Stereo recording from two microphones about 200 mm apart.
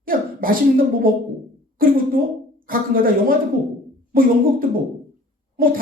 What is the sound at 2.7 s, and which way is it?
Speech, 45° right (ahead or behind).